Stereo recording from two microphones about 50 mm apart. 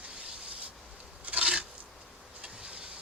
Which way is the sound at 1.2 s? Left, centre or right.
Right.